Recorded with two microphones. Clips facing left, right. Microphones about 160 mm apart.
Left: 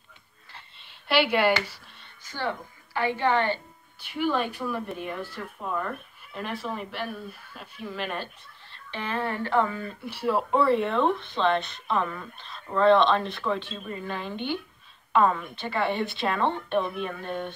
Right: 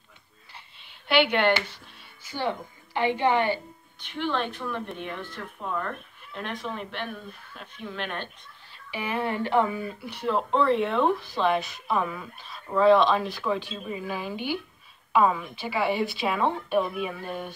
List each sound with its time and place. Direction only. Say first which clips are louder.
0.6 s a sound: even; centre (ahead or behind)
2.2 s a woman's voice: right 2 dB; 15° right (ahead or behind)
4.0 s speech: left 2 dB; 5° left (ahead or behind); by 9.9 s 15° right (ahead or behind)
10.0 s speech: left 2 dB; 5° left (ahead or behind)